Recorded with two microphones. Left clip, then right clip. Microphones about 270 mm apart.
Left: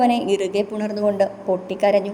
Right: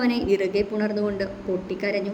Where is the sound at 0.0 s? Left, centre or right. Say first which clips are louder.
Left 4 dB; left.